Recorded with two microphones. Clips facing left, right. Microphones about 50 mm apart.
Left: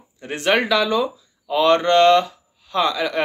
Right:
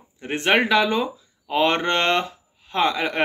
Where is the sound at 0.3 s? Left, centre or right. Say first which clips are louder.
Even; right.